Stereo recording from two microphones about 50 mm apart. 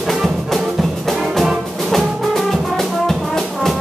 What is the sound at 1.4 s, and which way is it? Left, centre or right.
Music, centre.